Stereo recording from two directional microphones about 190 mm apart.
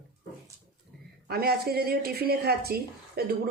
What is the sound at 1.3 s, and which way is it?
A woman's voice, 55° right (ahead or behind).